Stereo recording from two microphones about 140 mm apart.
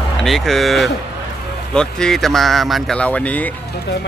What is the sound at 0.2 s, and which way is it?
Speech, centre (ahead or behind).